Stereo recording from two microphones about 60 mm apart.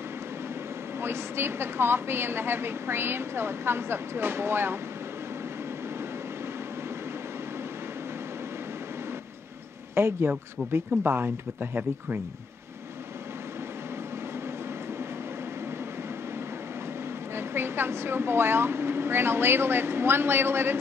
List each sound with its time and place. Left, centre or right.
1.0 s a woman's voice: right
9.9 s a woman's voice: right
17.4 s a woman's voice: right